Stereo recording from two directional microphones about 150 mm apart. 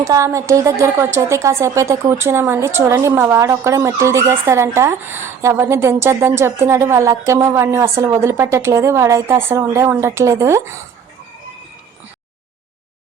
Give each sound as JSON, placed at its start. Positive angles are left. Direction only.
{"t": 0.0, "sound": "a woman's voice", "side_deg": -20}